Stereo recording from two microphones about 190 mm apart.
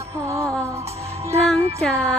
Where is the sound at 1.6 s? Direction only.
35° right (ahead or behind).